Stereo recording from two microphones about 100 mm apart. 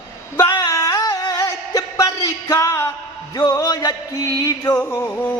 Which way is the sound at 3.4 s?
40° left (ahead or behind).